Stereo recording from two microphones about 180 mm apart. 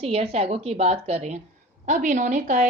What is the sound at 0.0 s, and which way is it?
A woman's voice, 35° right (ahead or behind).